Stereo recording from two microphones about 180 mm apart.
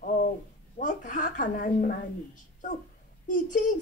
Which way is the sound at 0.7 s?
45° left (ahead or behind).